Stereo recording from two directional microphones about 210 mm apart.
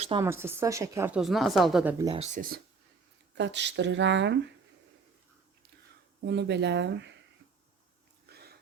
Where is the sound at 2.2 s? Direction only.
40° right (ahead or behind).